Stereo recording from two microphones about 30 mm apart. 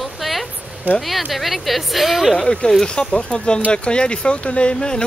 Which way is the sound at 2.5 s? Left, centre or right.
Left.